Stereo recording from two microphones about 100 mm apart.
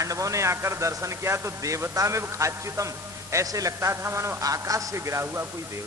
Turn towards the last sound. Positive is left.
turn(degrees=-25)  # may be behind; listen again after turning